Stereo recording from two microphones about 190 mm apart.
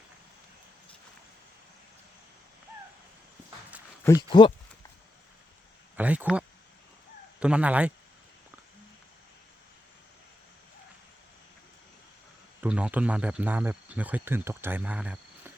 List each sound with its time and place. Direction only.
4.0 s speech: 20° left (ahead or behind)
6.0 s speech: 5° right (ahead or behind)
12.6 s speech: 5° right (ahead or behind)